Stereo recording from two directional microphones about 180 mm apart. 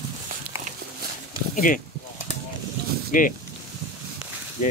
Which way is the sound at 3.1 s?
50° left (ahead or behind).